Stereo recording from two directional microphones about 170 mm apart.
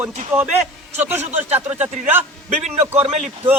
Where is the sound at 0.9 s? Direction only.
15° right (ahead or behind).